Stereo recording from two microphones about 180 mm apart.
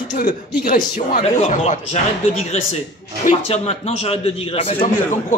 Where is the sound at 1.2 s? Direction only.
35° left (ahead or behind).